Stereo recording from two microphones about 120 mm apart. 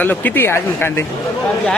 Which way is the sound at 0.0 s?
15° left (ahead or behind).